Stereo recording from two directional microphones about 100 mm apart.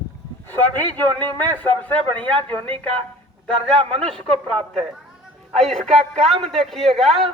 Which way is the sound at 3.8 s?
70° right (ahead or behind).